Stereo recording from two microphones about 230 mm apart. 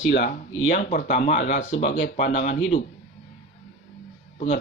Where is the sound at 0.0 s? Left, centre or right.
Left.